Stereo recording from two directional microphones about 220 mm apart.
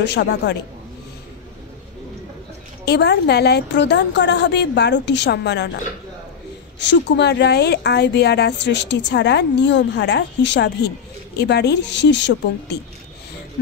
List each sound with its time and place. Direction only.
0.0 s speech: 50° left (ahead or behind)
2.8 s speech: 50° left (ahead or behind)
6.8 s speech: 55° left (ahead or behind)